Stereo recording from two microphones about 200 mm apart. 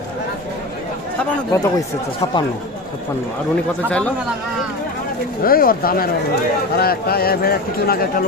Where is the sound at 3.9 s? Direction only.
5° left (ahead or behind).